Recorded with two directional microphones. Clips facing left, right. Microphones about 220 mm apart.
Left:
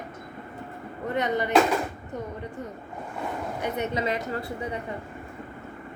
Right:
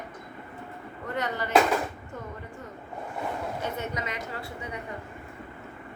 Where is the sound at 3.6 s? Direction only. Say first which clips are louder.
Left 5 dB; 20° left (ahead or behind).